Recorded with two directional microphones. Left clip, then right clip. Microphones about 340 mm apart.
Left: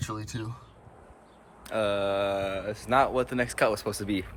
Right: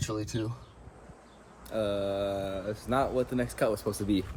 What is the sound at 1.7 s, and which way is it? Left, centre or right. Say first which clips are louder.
Speech: left 4 dB; centre.